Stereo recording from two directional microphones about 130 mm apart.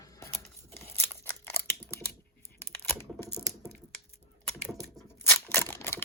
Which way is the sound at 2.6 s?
15° left (ahead or behind).